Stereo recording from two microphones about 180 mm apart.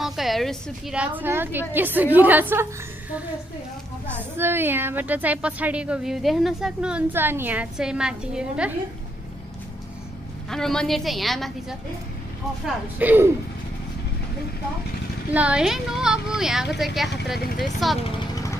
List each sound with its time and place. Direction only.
0.0 s a woman's voice: centre (ahead or behind)
10.5 s speech: centre (ahead or behind)
13.0 s a woman's voice: 10° right (ahead or behind)
15.3 s speech: 5° right (ahead or behind)
18.3 s vehicle: 20° left (ahead or behind)